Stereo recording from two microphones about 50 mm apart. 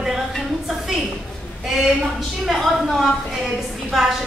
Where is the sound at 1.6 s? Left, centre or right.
Centre.